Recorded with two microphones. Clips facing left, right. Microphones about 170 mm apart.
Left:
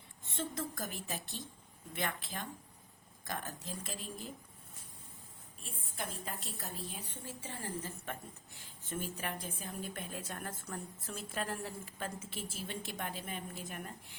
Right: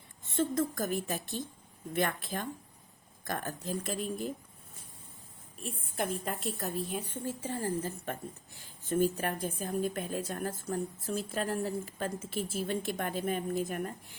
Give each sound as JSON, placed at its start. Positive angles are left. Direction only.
{"t": 0.3, "sound": "a woman's voice", "side_deg": -45}
{"t": 6.0, "sound": "a woman's voice", "side_deg": -60}
{"t": 7.4, "sound": "a woman's voice", "side_deg": -40}